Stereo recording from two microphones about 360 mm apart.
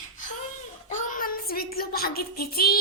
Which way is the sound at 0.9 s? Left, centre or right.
Left.